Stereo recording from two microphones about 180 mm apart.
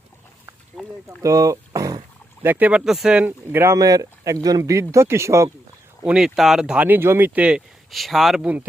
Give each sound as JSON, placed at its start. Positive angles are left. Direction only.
{"t": 0.8, "sound": "speech", "side_deg": 0}
{"t": 1.2, "sound": "boat", "side_deg": -15}
{"t": 2.5, "sound": "speech", "side_deg": -10}
{"t": 6.1, "sound": "speech", "side_deg": -5}